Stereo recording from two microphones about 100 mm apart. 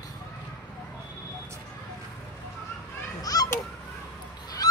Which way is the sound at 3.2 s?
40° left (ahead or behind).